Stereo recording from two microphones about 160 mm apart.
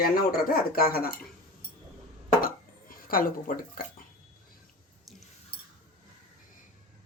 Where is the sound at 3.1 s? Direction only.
60° left (ahead or behind).